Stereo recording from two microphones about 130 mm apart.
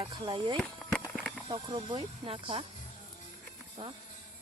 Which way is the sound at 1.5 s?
40° right (ahead or behind).